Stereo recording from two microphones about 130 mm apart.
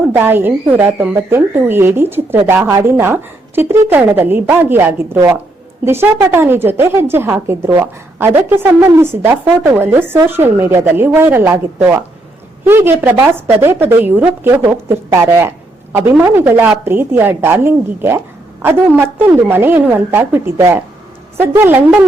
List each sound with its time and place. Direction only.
0.1 s a woman's voice: 15° right (ahead or behind)
2.6 s a woman's voice: 30° right (ahead or behind)
3.0 s a woman's voice: 15° right (ahead or behind)